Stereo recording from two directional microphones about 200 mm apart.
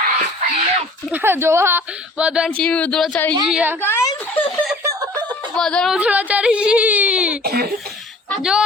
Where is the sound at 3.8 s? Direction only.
10° left (ahead or behind).